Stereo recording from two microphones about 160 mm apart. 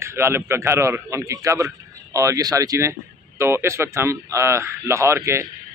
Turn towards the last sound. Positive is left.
turn(degrees=-15)  # may be behind; listen again after turning